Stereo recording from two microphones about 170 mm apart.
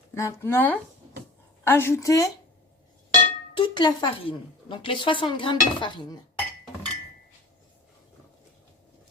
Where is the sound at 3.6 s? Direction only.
25° left (ahead or behind).